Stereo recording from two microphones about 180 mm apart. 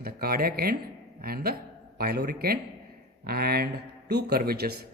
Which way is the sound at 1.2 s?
55° right (ahead or behind).